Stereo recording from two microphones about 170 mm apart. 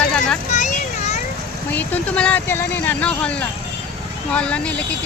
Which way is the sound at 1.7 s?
10° left (ahead or behind).